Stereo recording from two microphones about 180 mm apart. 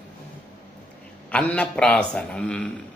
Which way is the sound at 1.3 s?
5° left (ahead or behind).